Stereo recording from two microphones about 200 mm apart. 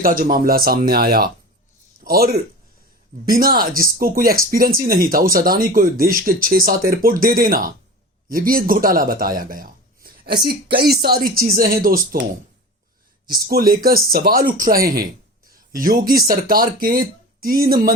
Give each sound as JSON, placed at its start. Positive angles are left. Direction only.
{"t": 0.0, "sound": "a man's voice", "side_deg": -45}
{"t": 13.3, "sound": "a man's voice", "side_deg": -50}